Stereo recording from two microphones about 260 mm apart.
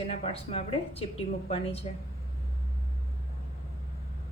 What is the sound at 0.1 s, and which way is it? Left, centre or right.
A woman's voice, left.